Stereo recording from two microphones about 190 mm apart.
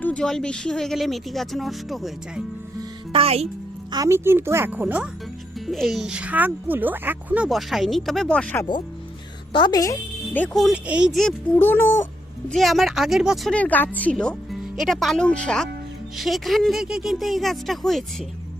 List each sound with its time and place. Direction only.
0.0 s speech: 5° left (ahead or behind)
2.7 s music: 30° right (ahead or behind)
3.9 s speech: 15° right (ahead or behind); by 8.6 s 5° left (ahead or behind)
9.5 s speech: 25° left (ahead or behind)
12.5 s speech: centre (ahead or behind)